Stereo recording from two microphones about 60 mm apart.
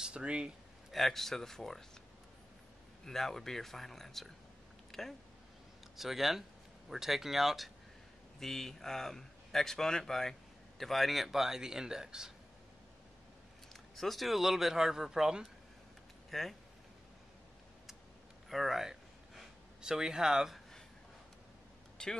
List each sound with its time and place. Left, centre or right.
0.0 s speech: centre
0.9 s speech: centre
3.1 s a man's voice: centre
13.7 s speech: centre
16.3 s speech: centre
18.5 s a sound: centre
21.9 s vehicle: centre